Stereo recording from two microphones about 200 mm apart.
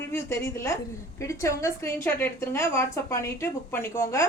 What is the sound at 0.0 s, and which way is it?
A woman's voice, 15° left (ahead or behind).